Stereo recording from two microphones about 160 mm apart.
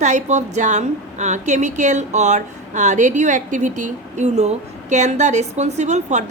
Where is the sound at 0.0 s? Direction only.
50° right (ahead or behind).